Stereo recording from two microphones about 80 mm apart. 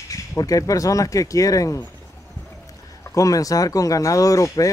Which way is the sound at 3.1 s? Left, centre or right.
Left.